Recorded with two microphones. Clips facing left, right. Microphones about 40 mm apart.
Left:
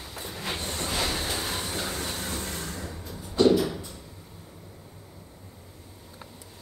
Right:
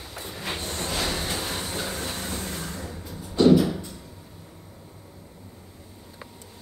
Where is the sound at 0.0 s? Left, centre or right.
Centre.